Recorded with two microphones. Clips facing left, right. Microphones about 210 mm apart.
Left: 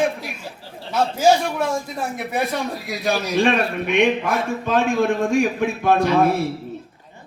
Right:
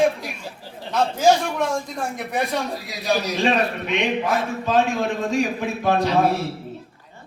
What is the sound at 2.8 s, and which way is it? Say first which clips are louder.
A man's voice: left 2 dB; 55° left (ahead or behind).